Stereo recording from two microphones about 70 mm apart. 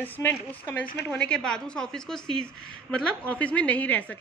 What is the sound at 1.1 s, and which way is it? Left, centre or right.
A woman's voice, centre.